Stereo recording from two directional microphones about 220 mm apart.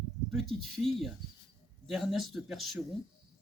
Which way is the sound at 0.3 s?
Centre (ahead or behind).